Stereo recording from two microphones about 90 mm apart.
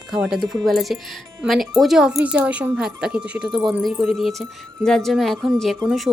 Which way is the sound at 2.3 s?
15° right (ahead or behind).